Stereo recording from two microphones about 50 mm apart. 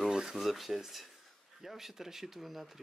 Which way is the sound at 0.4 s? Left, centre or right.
Centre.